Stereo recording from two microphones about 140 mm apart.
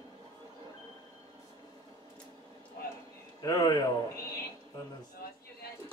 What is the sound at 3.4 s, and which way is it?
Speech, 30° left (ahead or behind).